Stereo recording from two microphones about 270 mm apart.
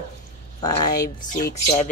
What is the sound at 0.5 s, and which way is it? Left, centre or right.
Speech, centre.